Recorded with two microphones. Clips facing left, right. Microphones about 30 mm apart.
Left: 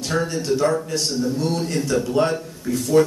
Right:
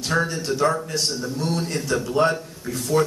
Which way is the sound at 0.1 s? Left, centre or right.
Centre.